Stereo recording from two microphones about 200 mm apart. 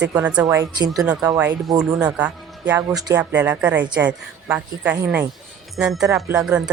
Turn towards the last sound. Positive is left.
turn(degrees=-5)  # may be behind; listen again after turning